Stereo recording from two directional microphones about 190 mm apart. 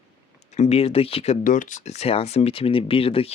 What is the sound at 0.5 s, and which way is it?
Speech, 35° left (ahead or behind).